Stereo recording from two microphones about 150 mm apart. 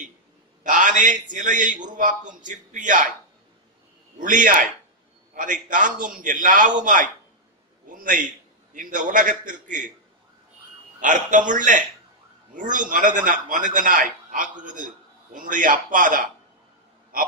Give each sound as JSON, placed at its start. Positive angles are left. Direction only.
{"t": 0.7, "sound": "a sound", "side_deg": -60}
{"t": 1.3, "sound": "a man's voice", "side_deg": -60}
{"t": 4.2, "sound": "a man's voice", "side_deg": -60}
{"t": 11.0, "sound": "a man's voice", "side_deg": -60}